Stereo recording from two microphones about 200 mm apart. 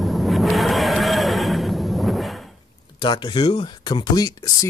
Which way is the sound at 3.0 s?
20° left (ahead or behind).